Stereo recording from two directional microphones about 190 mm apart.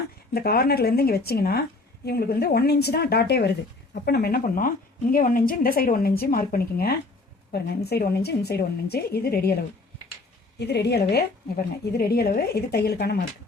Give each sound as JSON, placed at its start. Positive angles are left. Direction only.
{"t": 0.3, "sound": "a woman's voice", "side_deg": 55}